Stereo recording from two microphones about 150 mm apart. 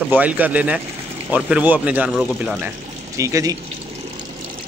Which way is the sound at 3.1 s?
20° right (ahead or behind).